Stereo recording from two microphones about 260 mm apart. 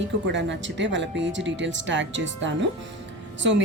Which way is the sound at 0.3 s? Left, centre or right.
Right.